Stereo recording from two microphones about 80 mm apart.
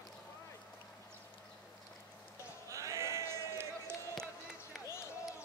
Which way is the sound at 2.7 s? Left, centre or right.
Right.